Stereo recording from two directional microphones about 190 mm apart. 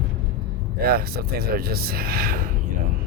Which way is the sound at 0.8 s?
50° right (ahead or behind).